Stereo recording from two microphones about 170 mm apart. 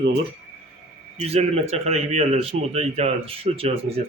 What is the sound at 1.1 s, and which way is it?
A man's voice, 40° right (ahead or behind).